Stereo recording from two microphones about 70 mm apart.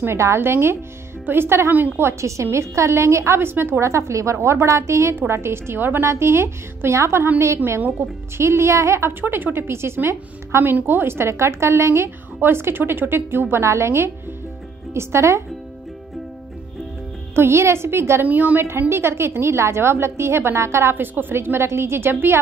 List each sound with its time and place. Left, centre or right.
0.0 s a woman's voice: right
2.0 s a woman's voice: right
9.2 s a woman's voice: right
17.4 s a woman's voice: right
18.2 s a woman's voice: right
18.6 s a woman's voice: right